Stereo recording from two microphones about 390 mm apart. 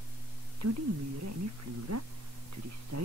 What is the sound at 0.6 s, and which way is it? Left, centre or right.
Speech, right.